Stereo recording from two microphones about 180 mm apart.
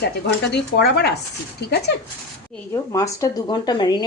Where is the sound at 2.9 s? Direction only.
20° left (ahead or behind).